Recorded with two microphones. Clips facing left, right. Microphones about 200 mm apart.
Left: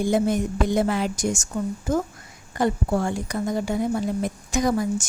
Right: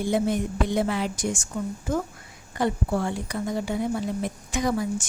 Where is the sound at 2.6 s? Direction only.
45° left (ahead or behind).